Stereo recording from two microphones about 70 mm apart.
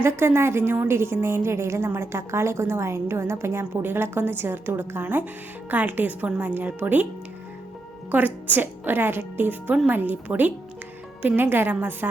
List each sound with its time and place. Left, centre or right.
0.0 s a woman's voice: right
8.1 s a woman's voice: right